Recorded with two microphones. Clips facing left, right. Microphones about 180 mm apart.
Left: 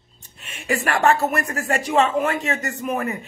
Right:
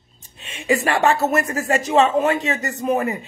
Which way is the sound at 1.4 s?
40° right (ahead or behind).